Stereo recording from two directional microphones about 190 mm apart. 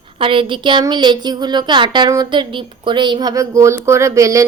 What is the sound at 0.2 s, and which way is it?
A woman's voice, 25° right (ahead or behind).